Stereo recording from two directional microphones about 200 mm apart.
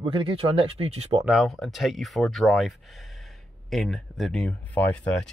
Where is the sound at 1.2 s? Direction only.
Centre (ahead or behind).